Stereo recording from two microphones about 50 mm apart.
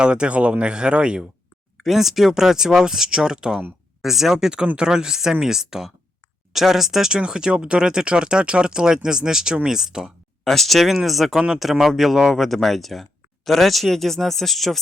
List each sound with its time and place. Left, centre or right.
0.0 s speech: centre
1.8 s speech: centre
10.4 s speech: centre
11.3 s speech: centre